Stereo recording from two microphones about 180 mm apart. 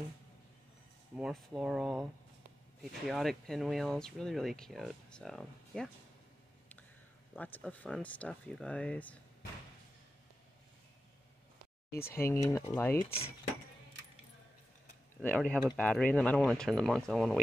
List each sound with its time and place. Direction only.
1.1 s speech: 5° right (ahead or behind)
7.3 s speech: 10° left (ahead or behind)
12.1 s speech: 15° left (ahead or behind)
13.0 s cutlery: 30° left (ahead or behind)
15.2 s speech: 10° left (ahead or behind)